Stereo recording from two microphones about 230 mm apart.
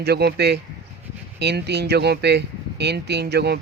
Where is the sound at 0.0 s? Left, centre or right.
Right.